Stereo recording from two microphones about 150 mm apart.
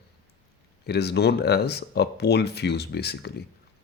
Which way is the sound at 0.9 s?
90° left.